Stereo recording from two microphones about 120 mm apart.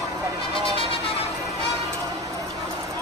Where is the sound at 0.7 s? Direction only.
50° left (ahead or behind).